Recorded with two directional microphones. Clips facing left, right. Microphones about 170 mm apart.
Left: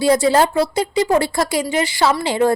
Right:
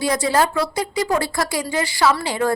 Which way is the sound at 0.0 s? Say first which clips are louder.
Left 5 dB; 25° left (ahead or behind).